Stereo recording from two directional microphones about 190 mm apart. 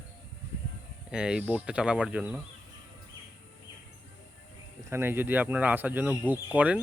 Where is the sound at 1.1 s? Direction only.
5° right (ahead or behind).